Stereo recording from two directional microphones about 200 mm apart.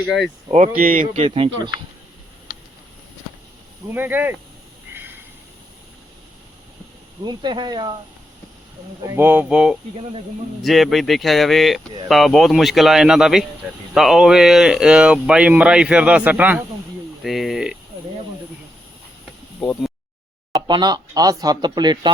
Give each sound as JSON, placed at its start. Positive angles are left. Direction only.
{"t": 0.0, "sound": "speech", "side_deg": 0}
{"t": 0.8, "sound": "speech", "side_deg": -45}
{"t": 3.8, "sound": "speech", "side_deg": -10}
{"t": 7.3, "sound": "speech", "side_deg": -20}
{"t": 9.0, "sound": "speech", "side_deg": -10}
{"t": 20.5, "sound": "speech", "side_deg": -20}